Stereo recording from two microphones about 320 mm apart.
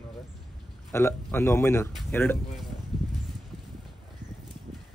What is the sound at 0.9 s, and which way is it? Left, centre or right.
Speech, centre.